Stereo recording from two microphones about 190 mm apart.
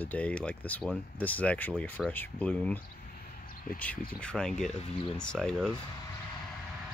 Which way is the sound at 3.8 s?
5° left (ahead or behind).